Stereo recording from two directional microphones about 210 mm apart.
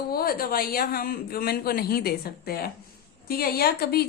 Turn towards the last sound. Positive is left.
turn(degrees=50)  # may be behind; listen again after turning